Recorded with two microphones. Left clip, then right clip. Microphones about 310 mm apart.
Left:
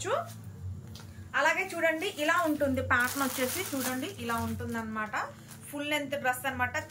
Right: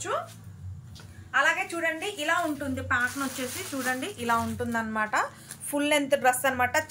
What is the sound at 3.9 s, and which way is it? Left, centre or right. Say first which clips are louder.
A woman's voice: right 6 dB; centre.